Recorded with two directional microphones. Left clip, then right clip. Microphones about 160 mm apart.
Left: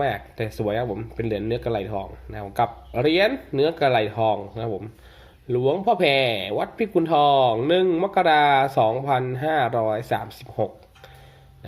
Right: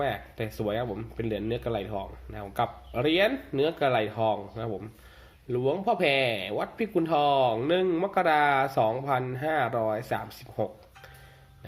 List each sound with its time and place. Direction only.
0.0 s speech: 20° left (ahead or behind)